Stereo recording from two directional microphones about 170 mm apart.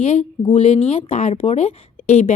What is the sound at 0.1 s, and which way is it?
Speech, 35° left (ahead or behind).